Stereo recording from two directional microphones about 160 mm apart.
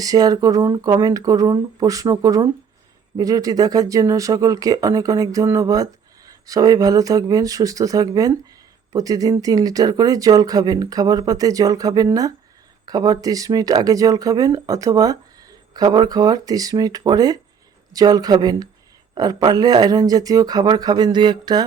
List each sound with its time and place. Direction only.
0.0 s speech: 25° right (ahead or behind)